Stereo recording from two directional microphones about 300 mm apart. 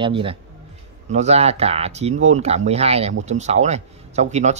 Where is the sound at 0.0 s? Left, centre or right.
Centre.